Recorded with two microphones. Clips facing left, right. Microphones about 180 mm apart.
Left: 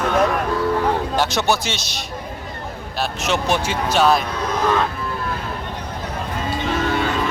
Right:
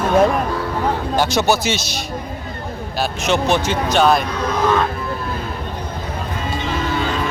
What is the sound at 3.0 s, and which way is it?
A man's voice, centre (ahead or behind).